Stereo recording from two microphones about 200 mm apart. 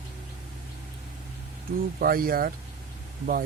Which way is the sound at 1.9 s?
45° right (ahead or behind).